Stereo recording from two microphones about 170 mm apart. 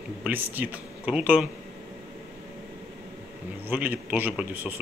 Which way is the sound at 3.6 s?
10° right (ahead or behind).